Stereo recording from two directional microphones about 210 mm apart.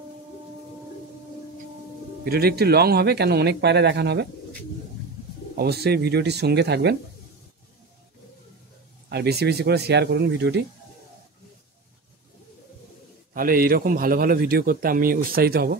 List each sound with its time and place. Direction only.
2.2 s speech: 45° right (ahead or behind)
5.6 s speech: 50° right (ahead or behind)
9.1 s speech: 50° right (ahead or behind)
13.3 s speech: 40° right (ahead or behind)